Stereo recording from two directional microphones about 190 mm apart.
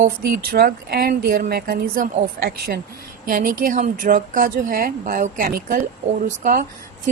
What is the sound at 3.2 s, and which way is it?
Speech, 45° right (ahead or behind).